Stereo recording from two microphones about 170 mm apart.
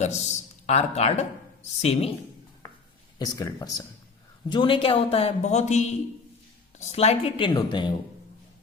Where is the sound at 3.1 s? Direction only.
20° left (ahead or behind).